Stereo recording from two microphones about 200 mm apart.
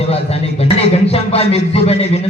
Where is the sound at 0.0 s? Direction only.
30° left (ahead or behind).